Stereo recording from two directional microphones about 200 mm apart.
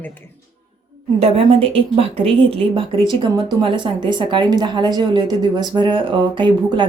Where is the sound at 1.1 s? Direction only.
30° right (ahead or behind).